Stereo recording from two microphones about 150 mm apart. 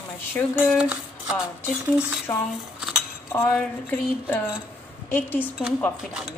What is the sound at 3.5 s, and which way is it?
A woman's voice, 10° left (ahead or behind).